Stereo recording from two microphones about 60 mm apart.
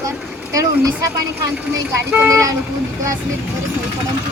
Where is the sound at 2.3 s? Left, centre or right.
Right.